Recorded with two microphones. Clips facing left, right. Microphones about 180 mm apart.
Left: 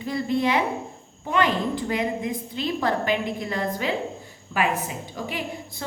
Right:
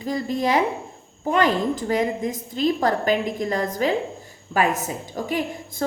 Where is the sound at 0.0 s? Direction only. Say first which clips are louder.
Even; 40° right (ahead or behind).